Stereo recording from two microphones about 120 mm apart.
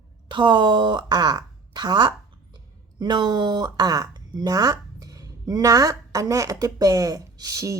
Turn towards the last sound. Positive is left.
turn(degrees=-25)  # may be behind; listen again after turning